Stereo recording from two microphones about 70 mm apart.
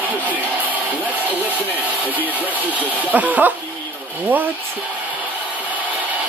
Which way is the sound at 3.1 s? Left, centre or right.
Right.